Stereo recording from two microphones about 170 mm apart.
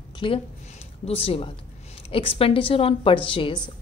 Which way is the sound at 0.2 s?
30° left (ahead or behind).